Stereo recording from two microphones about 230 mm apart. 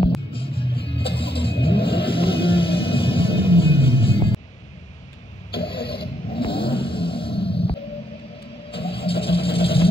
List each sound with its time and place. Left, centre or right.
0.3 s music: left
5.7 s a sound: left
8.7 s music: left